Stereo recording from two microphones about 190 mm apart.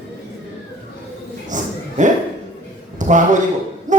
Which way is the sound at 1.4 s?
40° right (ahead or behind).